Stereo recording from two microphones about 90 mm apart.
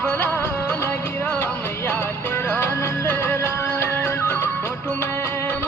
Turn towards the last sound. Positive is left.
turn(degrees=25)  # may be behind; listen again after turning